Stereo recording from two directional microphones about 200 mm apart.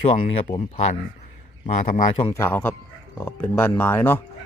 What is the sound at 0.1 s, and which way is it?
Speech, 35° left (ahead or behind).